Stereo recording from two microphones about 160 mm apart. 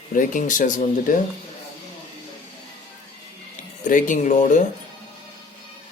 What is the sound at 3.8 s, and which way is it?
Speech, 55° left (ahead or behind).